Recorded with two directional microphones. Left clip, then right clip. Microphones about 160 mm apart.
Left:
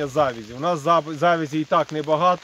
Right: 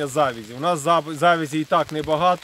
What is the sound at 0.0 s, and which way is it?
Speech, 5° right (ahead or behind).